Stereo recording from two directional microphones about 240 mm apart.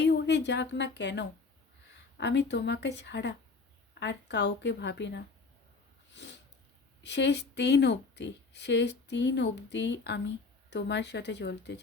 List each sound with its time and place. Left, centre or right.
0.0 s a woman's voice: left
6.1 s a sound: left
7.0 s a woman's voice: left